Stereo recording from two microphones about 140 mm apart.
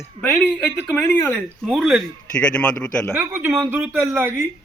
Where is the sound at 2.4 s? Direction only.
10° left (ahead or behind).